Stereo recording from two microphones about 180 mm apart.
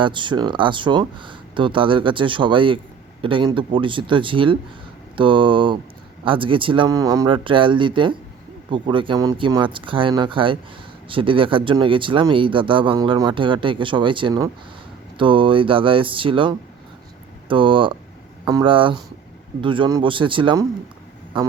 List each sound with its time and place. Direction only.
0.0 s speech: 25° right (ahead or behind)